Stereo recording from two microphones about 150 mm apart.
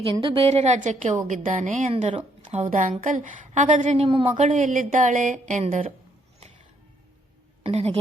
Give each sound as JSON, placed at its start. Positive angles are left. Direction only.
{"t": 0.3, "sound": "a woman's voice", "side_deg": -40}
{"t": 1.9, "sound": "speech", "side_deg": -45}
{"t": 2.6, "sound": "a woman's voice", "side_deg": -55}
{"t": 4.4, "sound": "a woman's voice", "side_deg": -60}
{"t": 7.6, "sound": "a woman's voice", "side_deg": -45}